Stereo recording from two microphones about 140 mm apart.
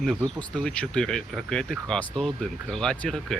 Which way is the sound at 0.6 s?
5° left (ahead or behind).